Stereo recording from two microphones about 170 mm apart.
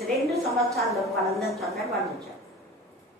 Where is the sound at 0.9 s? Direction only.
20° right (ahead or behind).